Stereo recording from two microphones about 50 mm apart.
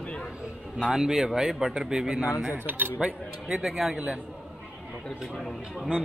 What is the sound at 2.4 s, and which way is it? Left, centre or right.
Speech, right.